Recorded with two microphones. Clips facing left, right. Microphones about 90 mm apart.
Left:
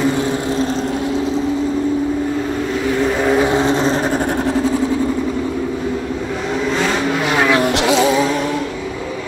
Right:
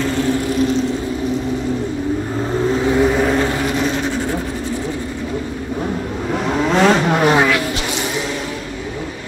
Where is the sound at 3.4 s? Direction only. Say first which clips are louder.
Left 4 dB; 25° left (ahead or behind).